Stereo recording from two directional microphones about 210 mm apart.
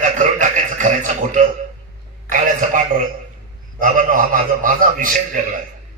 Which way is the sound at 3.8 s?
40° right (ahead or behind).